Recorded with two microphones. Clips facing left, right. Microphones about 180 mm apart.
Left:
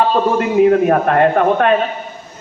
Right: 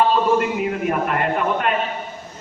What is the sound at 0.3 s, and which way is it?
A man's voice, 60° left (ahead or behind).